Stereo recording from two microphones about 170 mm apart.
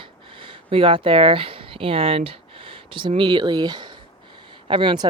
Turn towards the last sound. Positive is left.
turn(degrees=-30)  # may be behind; listen again after turning